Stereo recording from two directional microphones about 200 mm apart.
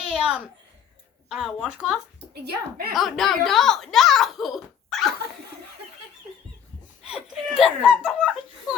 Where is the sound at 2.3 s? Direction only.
50° right (ahead or behind).